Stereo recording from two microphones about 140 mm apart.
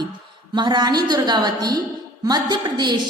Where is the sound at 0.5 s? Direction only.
30° right (ahead or behind).